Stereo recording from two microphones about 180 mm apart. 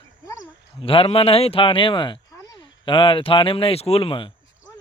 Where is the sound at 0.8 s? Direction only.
30° left (ahead or behind).